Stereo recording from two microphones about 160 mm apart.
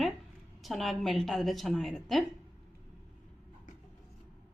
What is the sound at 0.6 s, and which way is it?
A woman's voice, centre (ahead or behind).